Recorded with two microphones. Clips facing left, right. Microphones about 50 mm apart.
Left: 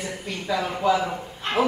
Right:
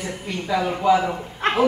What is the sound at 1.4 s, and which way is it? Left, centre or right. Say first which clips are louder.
Dog: right 6 dB; right.